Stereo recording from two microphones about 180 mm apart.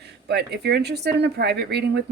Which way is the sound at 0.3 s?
70° right (ahead or behind).